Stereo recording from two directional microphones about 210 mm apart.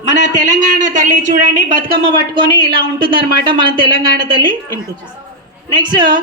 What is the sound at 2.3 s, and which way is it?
A woman's voice, 25° right (ahead or behind).